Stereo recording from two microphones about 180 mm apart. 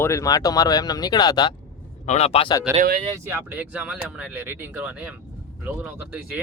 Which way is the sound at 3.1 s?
15° right (ahead or behind).